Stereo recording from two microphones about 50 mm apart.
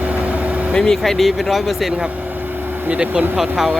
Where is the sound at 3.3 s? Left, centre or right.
Centre.